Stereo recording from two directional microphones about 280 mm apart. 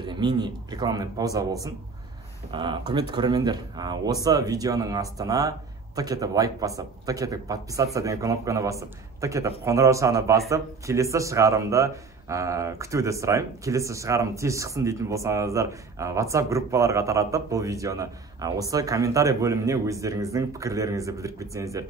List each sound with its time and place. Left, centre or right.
0.0 s a man's voice: centre